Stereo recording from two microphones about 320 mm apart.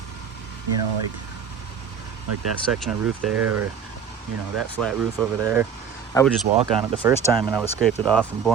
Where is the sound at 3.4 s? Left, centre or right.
Right.